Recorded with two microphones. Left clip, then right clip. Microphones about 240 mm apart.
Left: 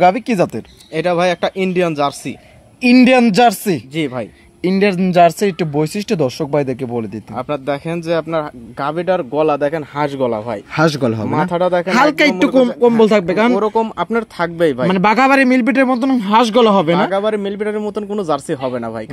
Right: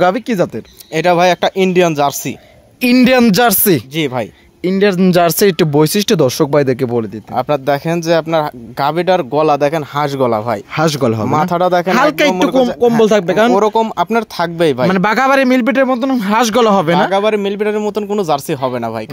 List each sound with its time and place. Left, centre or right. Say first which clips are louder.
0.0 s speech: left 1 dB; right
0.9 s speech: right 4 dB; right
4.6 s speech: right 1 dB; centre
5.0 s speech: left 1 dB; right
10.8 s speech: even; centre
11.2 s speech: right 3 dB; right
11.9 s speech: right 1 dB; centre
13.6 s speech: right 4 dB; right
14.9 s speech: even; right
16.2 s speech: left 1 dB; right
17.1 s speech: right 4 dB; right